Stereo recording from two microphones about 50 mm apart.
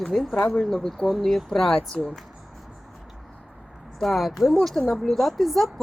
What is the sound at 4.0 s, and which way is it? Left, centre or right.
Speech, centre.